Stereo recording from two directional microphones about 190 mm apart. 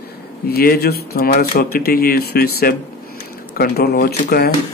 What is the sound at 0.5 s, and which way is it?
Speech, 55° left (ahead or behind).